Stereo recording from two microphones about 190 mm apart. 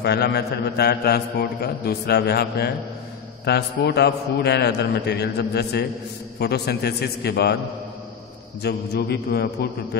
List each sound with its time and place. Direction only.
0.0 s a man's voice: 60° left (ahead or behind)
8.6 s a man's voice: 55° left (ahead or behind)